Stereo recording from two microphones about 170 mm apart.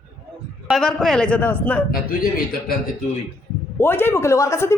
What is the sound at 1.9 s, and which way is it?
Speech, 60° left (ahead or behind).